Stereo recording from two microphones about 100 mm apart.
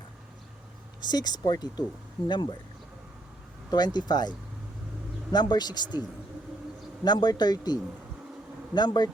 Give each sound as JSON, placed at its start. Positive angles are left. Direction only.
{"t": 1.0, "sound": "speech", "side_deg": 40}
{"t": 3.7, "sound": "speech", "side_deg": 45}